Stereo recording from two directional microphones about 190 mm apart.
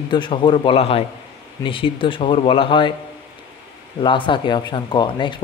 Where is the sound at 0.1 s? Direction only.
25° left (ahead or behind).